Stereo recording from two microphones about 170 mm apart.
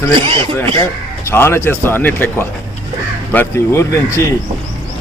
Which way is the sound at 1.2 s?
15° left (ahead or behind).